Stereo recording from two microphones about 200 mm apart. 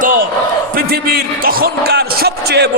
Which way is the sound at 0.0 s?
40° right (ahead or behind).